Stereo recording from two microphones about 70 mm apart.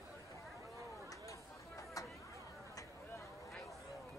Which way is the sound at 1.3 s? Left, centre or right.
Left.